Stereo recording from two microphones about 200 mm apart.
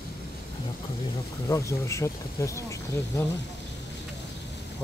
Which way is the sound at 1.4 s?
15° left (ahead or behind).